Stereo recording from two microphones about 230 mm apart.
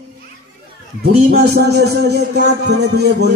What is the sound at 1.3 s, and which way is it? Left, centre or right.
A man's voice, right.